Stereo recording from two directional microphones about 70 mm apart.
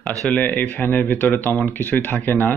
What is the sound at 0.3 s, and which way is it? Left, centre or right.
Speech, left.